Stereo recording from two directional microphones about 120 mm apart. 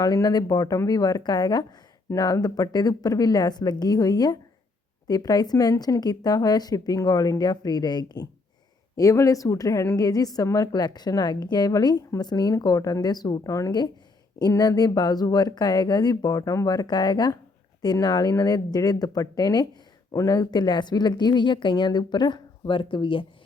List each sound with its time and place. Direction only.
0.0 s a woman's voice: 30° left (ahead or behind)